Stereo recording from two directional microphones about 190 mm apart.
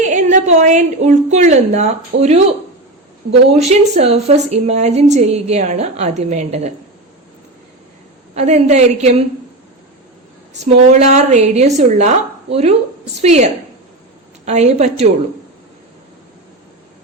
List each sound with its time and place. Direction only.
0.0 s a woman's voice: 40° right (ahead or behind)
3.5 s a woman's voice: 35° right (ahead or behind)
8.4 s a woman's voice: 35° right (ahead or behind)
10.6 s a woman's voice: 35° right (ahead or behind)